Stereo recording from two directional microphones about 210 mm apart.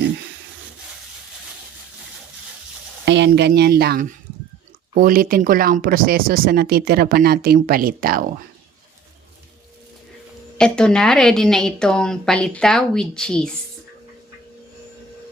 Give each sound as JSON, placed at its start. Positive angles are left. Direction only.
{"t": 3.1, "sound": "speech", "side_deg": -55}
{"t": 10.6, "sound": "a woman's voice", "side_deg": 5}